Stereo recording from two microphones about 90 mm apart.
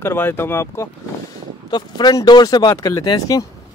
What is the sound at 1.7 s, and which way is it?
Speech, 55° left (ahead or behind).